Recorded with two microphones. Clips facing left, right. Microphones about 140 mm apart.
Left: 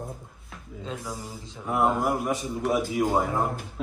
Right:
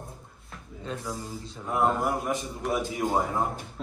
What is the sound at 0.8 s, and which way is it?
Speech, 20° left (ahead or behind).